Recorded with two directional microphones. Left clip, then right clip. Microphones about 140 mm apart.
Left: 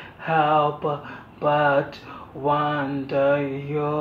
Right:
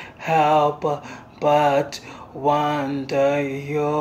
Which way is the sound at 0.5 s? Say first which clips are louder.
Right 2 dB; 20° right (ahead or behind).